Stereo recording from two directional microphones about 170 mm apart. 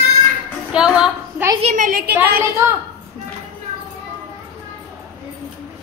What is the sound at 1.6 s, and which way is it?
Speech, 50° right (ahead or behind).